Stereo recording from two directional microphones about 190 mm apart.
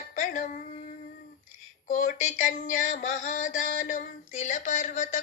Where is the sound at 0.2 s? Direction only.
40° left (ahead or behind).